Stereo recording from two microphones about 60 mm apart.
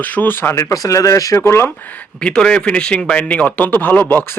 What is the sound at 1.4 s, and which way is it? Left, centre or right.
Speech, left.